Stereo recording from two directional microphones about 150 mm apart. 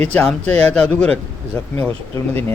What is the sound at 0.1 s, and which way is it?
Speech, 10° left (ahead or behind).